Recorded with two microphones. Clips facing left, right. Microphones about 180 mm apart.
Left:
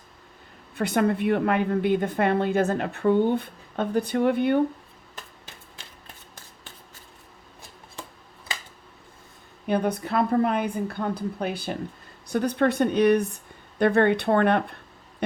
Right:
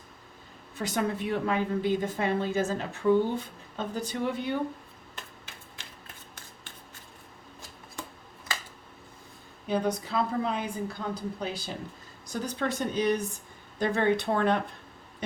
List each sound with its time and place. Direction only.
0.8 s a woman's voice: 60° left (ahead or behind)
9.6 s a woman's voice: 60° left (ahead or behind)